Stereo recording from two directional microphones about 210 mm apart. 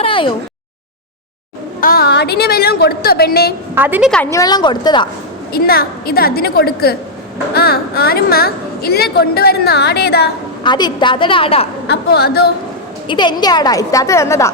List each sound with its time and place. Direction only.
0.0 s a sound: 25° left (ahead or behind)
1.8 s a woman's voice: 45° left (ahead or behind)
3.8 s a woman's voice: 10° right (ahead or behind)
4.1 s a woman's voice: 10° left (ahead or behind)
5.5 s a woman's voice: 45° left (ahead or behind)
10.6 s a woman's voice: 20° left (ahead or behind)
11.9 s a woman's voice: 50° left (ahead or behind)
13.1 s a woman's voice: 20° left (ahead or behind)